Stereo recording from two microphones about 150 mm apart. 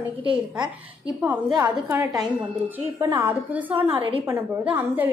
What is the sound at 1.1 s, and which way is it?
A woman's voice, 10° right (ahead or behind).